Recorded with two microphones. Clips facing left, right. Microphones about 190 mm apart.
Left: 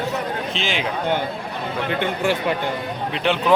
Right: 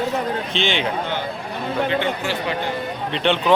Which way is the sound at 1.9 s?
55° left (ahead or behind).